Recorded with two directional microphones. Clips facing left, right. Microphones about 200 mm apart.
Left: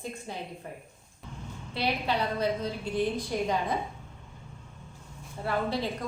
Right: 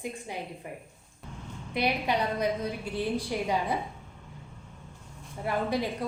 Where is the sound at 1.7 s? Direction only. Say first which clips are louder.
Right 1 dB; 15° right (ahead or behind).